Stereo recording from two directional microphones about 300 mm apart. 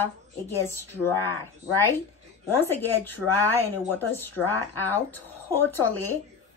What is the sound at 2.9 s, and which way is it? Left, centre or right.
Speech, left.